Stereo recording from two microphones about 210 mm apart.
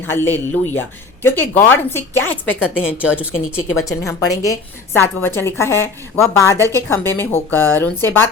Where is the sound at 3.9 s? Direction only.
15° left (ahead or behind).